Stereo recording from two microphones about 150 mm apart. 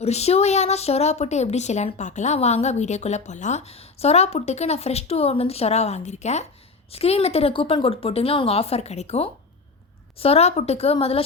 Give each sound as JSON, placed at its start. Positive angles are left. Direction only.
{"t": 0.0, "sound": "a woman's voice", "side_deg": 45}